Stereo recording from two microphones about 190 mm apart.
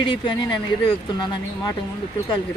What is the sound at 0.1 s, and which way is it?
Speech, 25° left (ahead or behind).